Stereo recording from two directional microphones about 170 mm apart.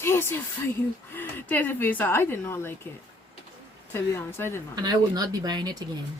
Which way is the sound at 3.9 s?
15° left (ahead or behind).